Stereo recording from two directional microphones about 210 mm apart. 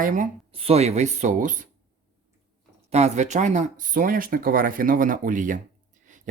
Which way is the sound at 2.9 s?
30° right (ahead or behind).